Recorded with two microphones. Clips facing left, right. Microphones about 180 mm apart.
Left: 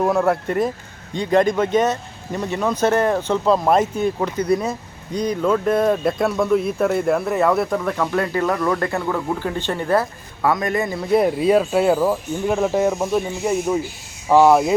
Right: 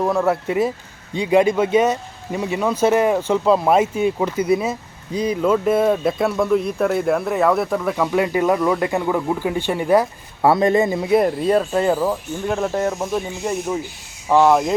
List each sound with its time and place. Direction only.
0.0 s speech: centre (ahead or behind)
10.4 s speech: 25° right (ahead or behind)
11.1 s speech: centre (ahead or behind)